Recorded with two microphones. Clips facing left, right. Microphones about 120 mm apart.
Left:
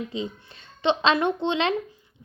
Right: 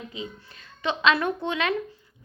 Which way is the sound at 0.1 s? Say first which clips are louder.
Left 5 dB; 30° left (ahead or behind).